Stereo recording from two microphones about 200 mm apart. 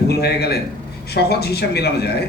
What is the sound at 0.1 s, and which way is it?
Speech, 55° left (ahead or behind).